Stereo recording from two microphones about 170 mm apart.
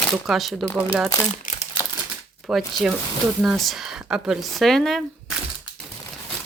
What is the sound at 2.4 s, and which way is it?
Speech, centre (ahead or behind).